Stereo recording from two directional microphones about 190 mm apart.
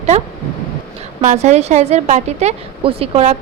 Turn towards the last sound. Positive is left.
turn(degrees=-30)  # may be behind; listen again after turning